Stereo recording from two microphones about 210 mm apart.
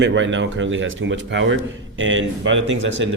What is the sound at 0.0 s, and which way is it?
Speech, 60° right (ahead or behind).